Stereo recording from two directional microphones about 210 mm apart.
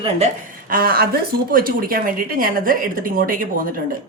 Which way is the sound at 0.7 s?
45° right (ahead or behind).